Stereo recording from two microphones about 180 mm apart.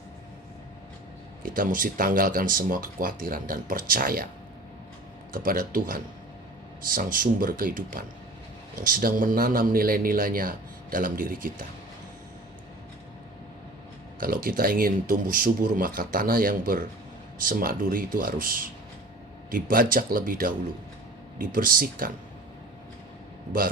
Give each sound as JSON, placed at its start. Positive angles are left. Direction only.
{"t": 1.4, "sound": "speech", "side_deg": -50}
{"t": 5.3, "sound": "speech", "side_deg": -50}
{"t": 14.2, "sound": "speech", "side_deg": -50}